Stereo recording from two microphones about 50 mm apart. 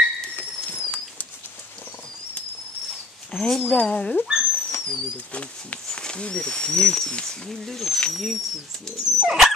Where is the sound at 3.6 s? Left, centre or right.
Left.